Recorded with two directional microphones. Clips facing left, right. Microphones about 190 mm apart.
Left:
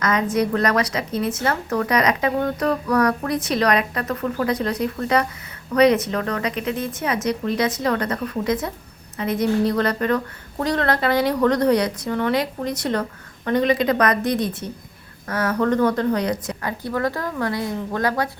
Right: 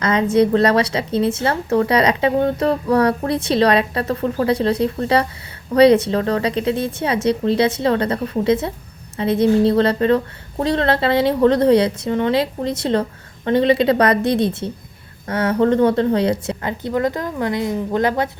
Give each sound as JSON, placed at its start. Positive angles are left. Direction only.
{"t": 0.0, "sound": "a woman's voice", "side_deg": -30}